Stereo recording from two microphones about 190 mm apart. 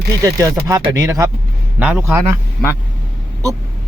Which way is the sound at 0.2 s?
15° right (ahead or behind).